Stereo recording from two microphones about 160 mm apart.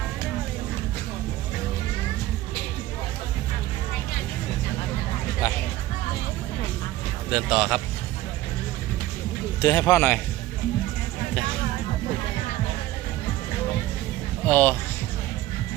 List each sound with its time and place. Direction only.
5.4 s a sound: 20° left (ahead or behind)
7.3 s speech: 5° right (ahead or behind)
9.6 s speech: 25° left (ahead or behind)
14.4 s speech: 10° left (ahead or behind)